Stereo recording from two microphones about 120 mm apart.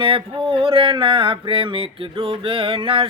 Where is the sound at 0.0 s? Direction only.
50° right (ahead or behind).